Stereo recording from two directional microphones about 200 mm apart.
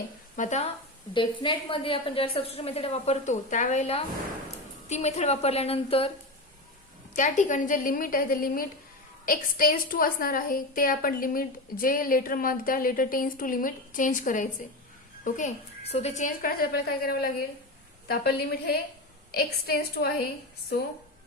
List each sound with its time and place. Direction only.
0.3 s speech: 35° left (ahead or behind)
1.1 s a woman's voice: 25° left (ahead or behind)
7.1 s a woman's voice: 40° left (ahead or behind)